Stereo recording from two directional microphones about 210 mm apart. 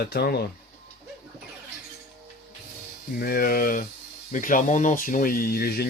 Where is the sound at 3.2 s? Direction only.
45° left (ahead or behind).